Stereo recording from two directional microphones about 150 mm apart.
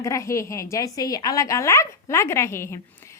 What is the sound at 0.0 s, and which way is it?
A woman's voice, 20° left (ahead or behind).